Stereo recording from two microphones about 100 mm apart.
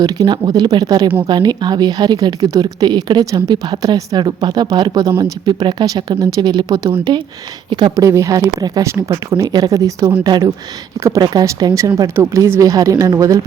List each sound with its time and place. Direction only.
0.0 s a woman's voice: 40° right (ahead or behind)
7.9 s a woman's voice: 30° right (ahead or behind)